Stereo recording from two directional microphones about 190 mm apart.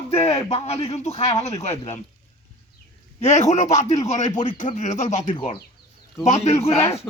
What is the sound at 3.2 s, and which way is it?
A man's voice, 35° left (ahead or behind).